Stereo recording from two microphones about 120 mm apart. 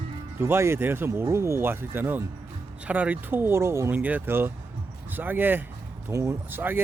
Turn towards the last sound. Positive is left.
turn(degrees=-15)  # may be behind; listen again after turning